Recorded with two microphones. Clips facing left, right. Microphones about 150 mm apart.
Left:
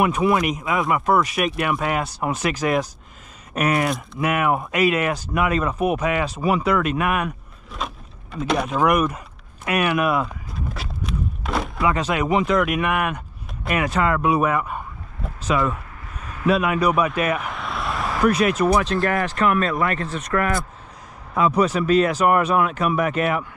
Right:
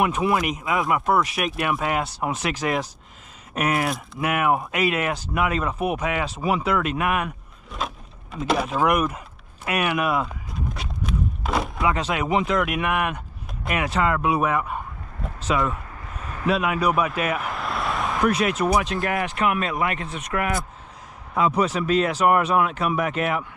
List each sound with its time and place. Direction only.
0.0 s speech: centre (ahead or behind)
3.5 s speech: 5° right (ahead or behind)
10.7 s walk: centre (ahead or behind)
13.7 s speech: centre (ahead or behind)
17.3 s vehicle: centre (ahead or behind)
18.9 s speech: 40° left (ahead or behind)
21.4 s speech: 10° right (ahead or behind)